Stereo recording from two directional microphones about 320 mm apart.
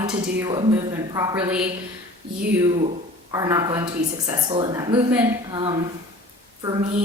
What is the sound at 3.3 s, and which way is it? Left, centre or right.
Speech, centre.